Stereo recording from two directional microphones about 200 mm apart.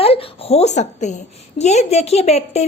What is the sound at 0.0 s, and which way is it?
A woman's voice, 30° left (ahead or behind).